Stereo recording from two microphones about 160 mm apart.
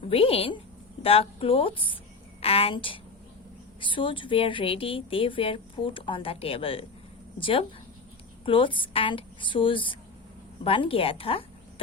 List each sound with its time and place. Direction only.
0.1 s speech: 35° left (ahead or behind)